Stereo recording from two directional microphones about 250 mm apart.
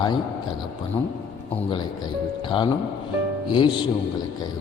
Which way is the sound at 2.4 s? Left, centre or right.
Centre.